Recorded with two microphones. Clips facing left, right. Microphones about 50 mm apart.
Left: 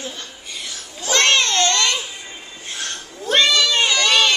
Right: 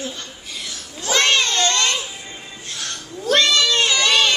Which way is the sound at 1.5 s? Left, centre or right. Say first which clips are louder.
Left 1 dB; left.